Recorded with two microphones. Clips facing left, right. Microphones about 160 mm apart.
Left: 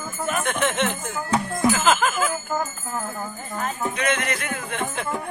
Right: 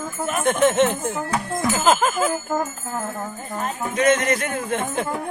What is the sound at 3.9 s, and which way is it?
Music, 45° right (ahead or behind).